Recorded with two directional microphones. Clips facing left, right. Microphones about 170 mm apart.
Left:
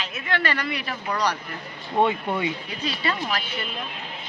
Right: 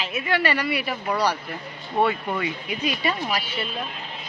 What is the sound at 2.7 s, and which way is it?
Speech, 10° right (ahead or behind).